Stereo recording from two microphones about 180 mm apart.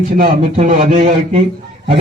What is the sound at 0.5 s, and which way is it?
Speech, 35° right (ahead or behind).